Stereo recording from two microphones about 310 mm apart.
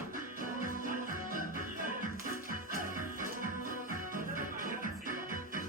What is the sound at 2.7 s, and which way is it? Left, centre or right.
Music, right.